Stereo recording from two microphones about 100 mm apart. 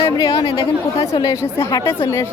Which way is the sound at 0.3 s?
60° left (ahead or behind).